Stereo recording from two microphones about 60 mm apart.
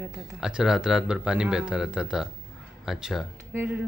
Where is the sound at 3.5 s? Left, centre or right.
Right.